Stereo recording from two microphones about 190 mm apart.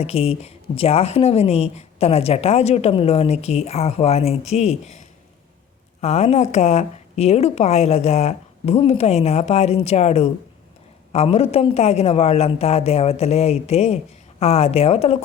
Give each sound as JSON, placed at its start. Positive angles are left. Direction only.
{"t": 0.0, "sound": "a woman's voice", "side_deg": 30}